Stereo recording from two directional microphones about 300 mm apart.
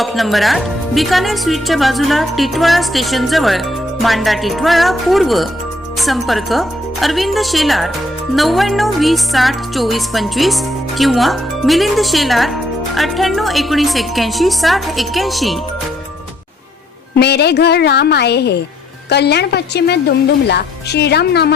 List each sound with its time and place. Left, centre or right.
0.0 s music: centre
17.2 s a woman's voice: left